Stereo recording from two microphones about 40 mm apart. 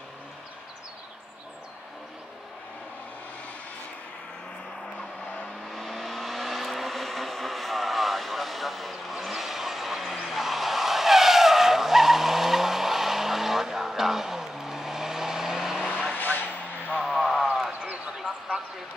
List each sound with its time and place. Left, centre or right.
5.7 s vehicle: centre
16.2 s vehicle: left
17.0 s a sound: centre